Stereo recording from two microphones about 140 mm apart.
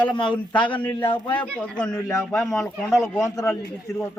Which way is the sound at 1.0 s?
35° left (ahead or behind).